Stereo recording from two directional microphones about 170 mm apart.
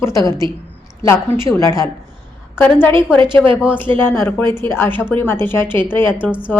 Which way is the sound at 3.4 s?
Centre (ahead or behind).